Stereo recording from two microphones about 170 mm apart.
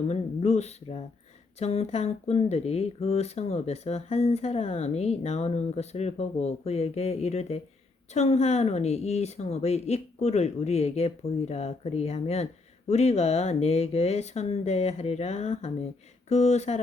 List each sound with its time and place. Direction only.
0.1 s speech: 40° left (ahead or behind)